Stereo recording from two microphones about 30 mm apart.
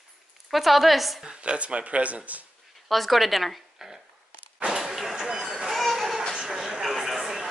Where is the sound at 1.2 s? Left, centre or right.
Right.